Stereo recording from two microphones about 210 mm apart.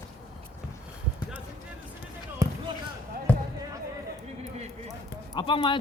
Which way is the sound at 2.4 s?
15° right (ahead or behind).